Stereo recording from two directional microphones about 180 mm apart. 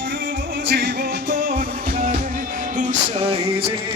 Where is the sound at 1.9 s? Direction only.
50° right (ahead or behind).